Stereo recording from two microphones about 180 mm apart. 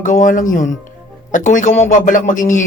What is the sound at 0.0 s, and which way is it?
Speech, 45° left (ahead or behind).